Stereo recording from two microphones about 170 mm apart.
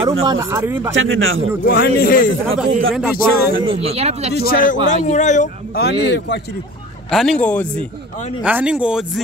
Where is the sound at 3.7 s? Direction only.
35° right (ahead or behind).